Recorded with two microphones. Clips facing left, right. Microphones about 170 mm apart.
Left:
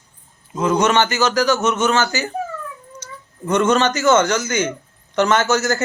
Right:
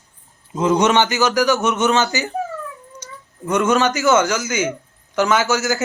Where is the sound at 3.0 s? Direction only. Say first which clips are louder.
Left 1 dB; 15° right (ahead or behind).